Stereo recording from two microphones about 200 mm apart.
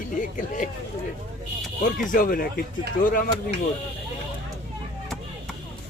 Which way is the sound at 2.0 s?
40° left (ahead or behind).